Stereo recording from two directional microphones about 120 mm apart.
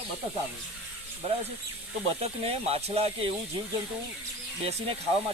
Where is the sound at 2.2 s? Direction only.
60° right (ahead or behind).